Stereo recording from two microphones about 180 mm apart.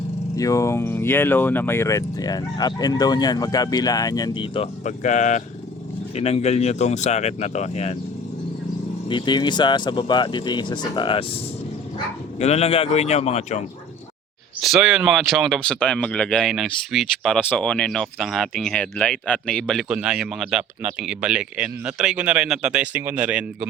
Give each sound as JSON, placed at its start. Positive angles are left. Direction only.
{"t": 0.3, "sound": "speech", "side_deg": 20}
{"t": 4.8, "sound": "speech", "side_deg": 40}
{"t": 9.0, "sound": "speech", "side_deg": 25}
{"t": 12.4, "sound": "speech", "side_deg": 35}
{"t": 14.6, "sound": "speech", "side_deg": -5}